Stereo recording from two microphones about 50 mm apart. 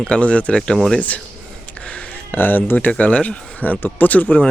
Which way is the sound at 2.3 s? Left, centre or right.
Left.